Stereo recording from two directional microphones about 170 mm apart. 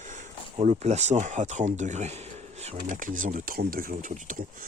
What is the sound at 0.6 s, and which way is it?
Speech, 40° right (ahead or behind).